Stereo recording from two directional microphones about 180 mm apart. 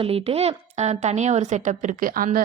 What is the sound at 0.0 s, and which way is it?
A woman's voice, 35° right (ahead or behind).